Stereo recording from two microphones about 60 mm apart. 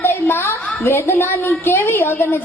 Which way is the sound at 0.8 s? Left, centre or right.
Left.